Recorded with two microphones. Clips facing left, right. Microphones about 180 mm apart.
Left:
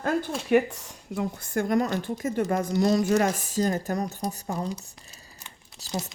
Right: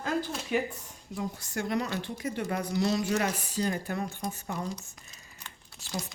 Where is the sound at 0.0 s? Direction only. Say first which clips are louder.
Left 4 dB; 55° left (ahead or behind).